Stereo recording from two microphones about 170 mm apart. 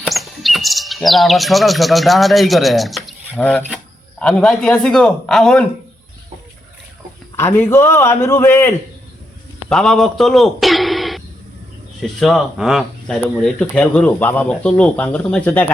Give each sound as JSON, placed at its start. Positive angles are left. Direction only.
{"t": 0.0, "sound": "speech", "side_deg": 0}
{"t": 7.3, "sound": "speech", "side_deg": 15}
{"t": 9.6, "sound": "a man's voice", "side_deg": 5}